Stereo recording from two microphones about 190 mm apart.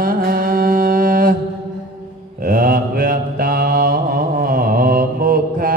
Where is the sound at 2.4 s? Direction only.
50° right (ahead or behind).